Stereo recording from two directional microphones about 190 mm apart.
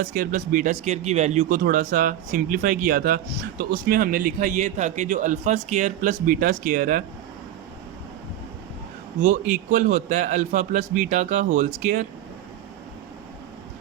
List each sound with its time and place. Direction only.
0.0 s a man's voice: 45° right (ahead or behind)
9.3 s a man's voice: 45° right (ahead or behind)